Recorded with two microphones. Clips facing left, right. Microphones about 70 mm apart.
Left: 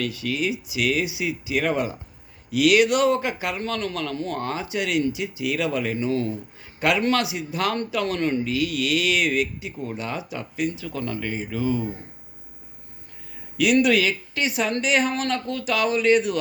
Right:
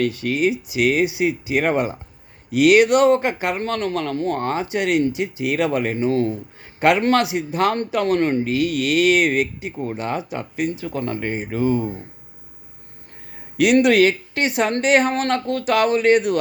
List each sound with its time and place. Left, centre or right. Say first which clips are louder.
0.0 s a man's voice: right 6 dB; right
13.6 s a man's voice: right 5 dB; right